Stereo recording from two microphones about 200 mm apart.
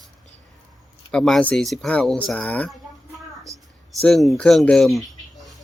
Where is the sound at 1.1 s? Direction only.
5° left (ahead or behind).